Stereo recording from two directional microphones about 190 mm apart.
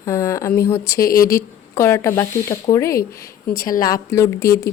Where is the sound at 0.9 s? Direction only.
50° left (ahead or behind).